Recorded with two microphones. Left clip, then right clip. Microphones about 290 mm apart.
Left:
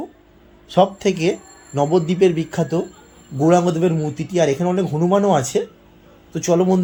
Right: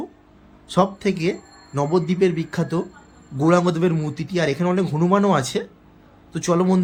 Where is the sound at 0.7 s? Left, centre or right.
Centre.